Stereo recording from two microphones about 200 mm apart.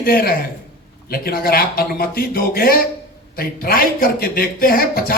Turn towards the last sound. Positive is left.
turn(degrees=50)  # may be behind; listen again after turning